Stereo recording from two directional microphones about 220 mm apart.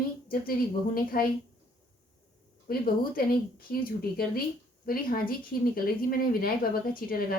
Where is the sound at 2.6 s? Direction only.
40° left (ahead or behind).